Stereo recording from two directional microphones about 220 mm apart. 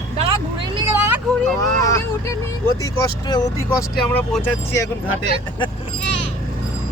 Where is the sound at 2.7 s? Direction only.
15° left (ahead or behind).